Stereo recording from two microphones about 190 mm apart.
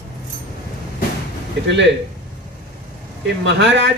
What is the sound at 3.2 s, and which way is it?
Speech, 70° right (ahead or behind).